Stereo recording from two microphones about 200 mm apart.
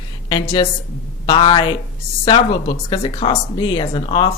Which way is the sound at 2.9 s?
25° left (ahead or behind).